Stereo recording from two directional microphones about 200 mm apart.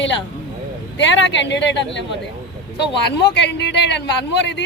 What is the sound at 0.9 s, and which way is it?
Speech, 65° left (ahead or behind).